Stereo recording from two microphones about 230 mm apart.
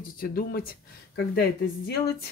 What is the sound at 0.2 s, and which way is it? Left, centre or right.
Speech, left.